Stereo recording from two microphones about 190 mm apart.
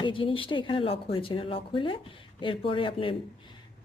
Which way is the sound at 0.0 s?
25° left (ahead or behind).